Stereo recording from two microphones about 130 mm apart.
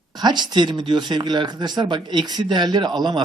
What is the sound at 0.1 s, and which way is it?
Speech, 35° right (ahead or behind).